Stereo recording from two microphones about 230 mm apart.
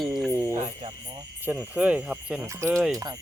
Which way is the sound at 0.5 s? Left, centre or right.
Right.